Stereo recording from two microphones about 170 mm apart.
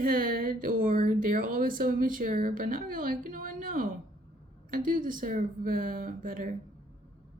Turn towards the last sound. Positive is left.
turn(degrees=-55)  # may be behind; listen again after turning